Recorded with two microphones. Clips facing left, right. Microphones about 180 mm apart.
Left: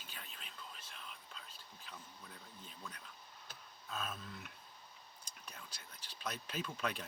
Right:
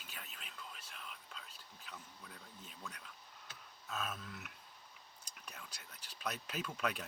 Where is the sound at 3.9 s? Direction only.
30° left (ahead or behind).